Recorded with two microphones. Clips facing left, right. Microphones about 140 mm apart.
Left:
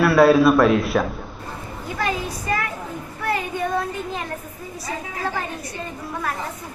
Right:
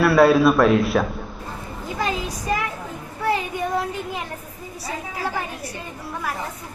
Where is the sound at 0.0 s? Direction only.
Centre (ahead or behind).